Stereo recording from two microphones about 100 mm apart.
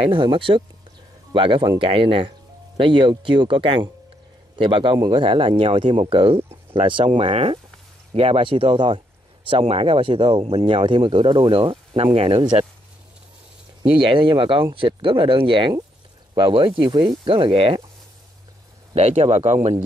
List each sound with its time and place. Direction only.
0.0 s speech: 60° right (ahead or behind); by 10.6 s 80° right
10.6 s speech: 60° right (ahead or behind)
13.9 s speech: 60° right (ahead or behind)
18.9 s speech: 80° right